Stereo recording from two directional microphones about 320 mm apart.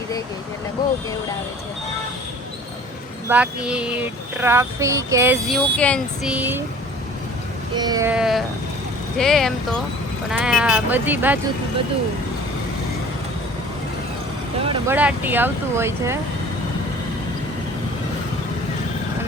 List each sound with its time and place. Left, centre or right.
3.2 s speech: centre
7.8 s speech: centre
14.6 s vehicle: centre
14.9 s speech: centre